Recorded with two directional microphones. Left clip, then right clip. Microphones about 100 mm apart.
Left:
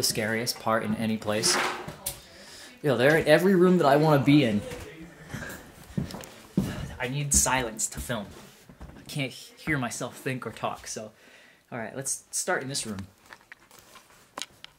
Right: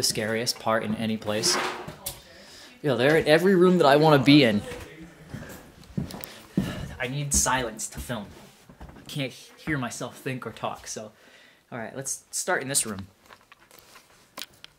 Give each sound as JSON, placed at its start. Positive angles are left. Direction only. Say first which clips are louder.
{"t": 0.0, "sound": "speech", "louder": "right 1 dB", "side_deg": 0}
{"t": 4.3, "sound": "speech", "louder": "right 4 dB", "side_deg": -30}
{"t": 7.0, "sound": "speech", "louder": "even", "side_deg": -5}
{"t": 12.6, "sound": "speech", "louder": "right 4 dB", "side_deg": -35}